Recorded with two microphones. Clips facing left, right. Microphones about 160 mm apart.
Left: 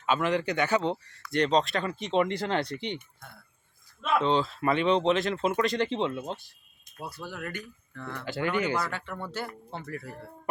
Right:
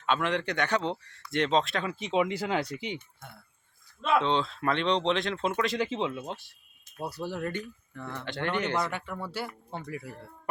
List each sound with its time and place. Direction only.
0.0 s speech: 5° left (ahead or behind)
4.0 s speech: centre (ahead or behind)
7.0 s speech: 35° right (ahead or behind)
7.9 s speech: 15° right (ahead or behind)
8.2 s speech: 5° left (ahead or behind)
8.8 s speech: 15° right (ahead or behind)